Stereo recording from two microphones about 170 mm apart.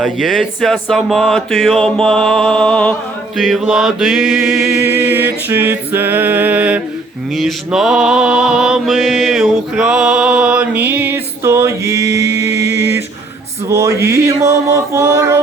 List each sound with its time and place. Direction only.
0.0 s a sound: centre (ahead or behind)
7.3 s mantra: centre (ahead or behind); by 12.6 s 20° right (ahead or behind)
13.7 s mantra: 20° right (ahead or behind)